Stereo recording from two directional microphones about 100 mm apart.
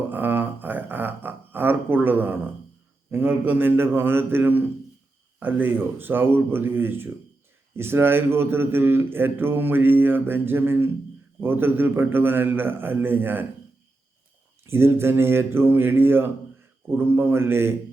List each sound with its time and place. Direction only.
0.1 s a sound: 20° right (ahead or behind)
3.1 s a man's voice: 20° right (ahead or behind)
14.6 s a man's voice: 25° right (ahead or behind)